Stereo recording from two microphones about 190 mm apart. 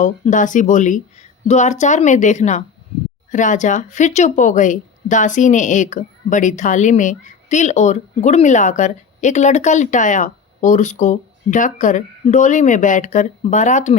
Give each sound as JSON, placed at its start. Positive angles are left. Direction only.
{"t": 0.0, "sound": "a woman's voice", "side_deg": 40}